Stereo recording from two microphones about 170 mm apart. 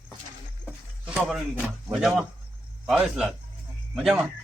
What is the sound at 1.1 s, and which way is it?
A man's voice, 5° right (ahead or behind).